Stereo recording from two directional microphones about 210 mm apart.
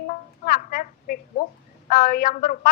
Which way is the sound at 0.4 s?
40° left (ahead or behind).